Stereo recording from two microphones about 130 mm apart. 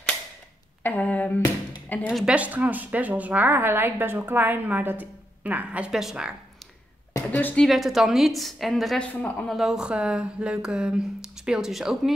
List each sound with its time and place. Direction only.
0.8 s speech: 10° left (ahead or behind)
2.0 s a woman's voice: 5° right (ahead or behind)
7.2 s speech: 10° left (ahead or behind)
7.6 s a woman's voice: centre (ahead or behind)